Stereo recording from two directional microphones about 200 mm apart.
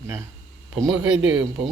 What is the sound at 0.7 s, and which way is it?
Speech, 5° right (ahead or behind).